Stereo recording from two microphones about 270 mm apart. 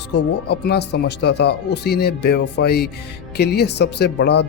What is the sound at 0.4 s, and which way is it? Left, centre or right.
Speech, left.